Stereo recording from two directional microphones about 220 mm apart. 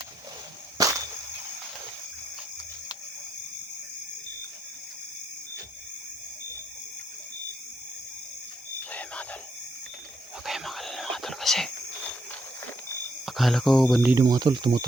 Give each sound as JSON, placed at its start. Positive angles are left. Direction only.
{"t": 0.8, "sound": "whip", "side_deg": -15}
{"t": 8.9, "sound": "cricket", "side_deg": 5}
{"t": 10.4, "sound": "whispering", "side_deg": 0}
{"t": 13.2, "sound": "speech", "side_deg": 0}